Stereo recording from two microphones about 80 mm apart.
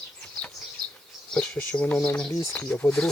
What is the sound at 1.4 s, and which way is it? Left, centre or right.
Speech, left.